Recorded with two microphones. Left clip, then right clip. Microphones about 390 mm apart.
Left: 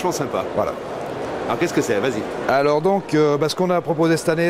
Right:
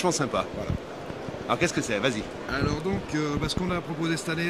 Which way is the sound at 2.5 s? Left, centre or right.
Left.